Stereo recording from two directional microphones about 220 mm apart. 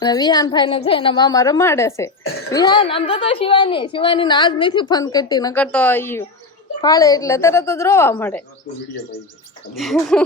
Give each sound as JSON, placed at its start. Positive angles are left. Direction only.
{"t": 0.0, "sound": "a woman's voice", "side_deg": 20}
{"t": 9.7, "sound": "speech", "side_deg": 0}